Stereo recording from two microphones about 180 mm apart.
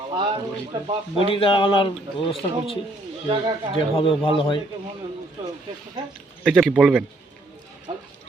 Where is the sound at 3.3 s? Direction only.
25° right (ahead or behind).